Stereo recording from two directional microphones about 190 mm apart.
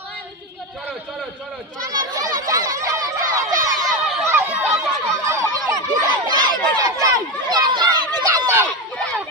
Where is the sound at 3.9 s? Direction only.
Centre (ahead or behind).